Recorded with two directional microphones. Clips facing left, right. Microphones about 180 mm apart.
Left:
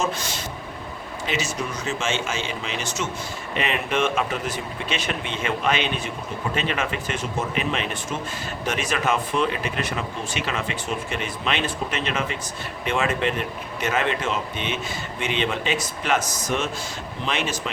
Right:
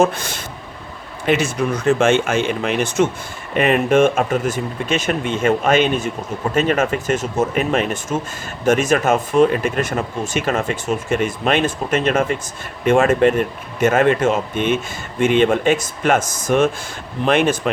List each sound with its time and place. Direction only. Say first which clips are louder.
0.0 s speech: right 9 dB; 55° right (ahead or behind)